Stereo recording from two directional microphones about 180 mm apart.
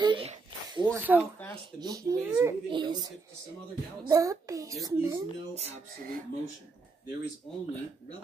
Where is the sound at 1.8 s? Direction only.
20° right (ahead or behind).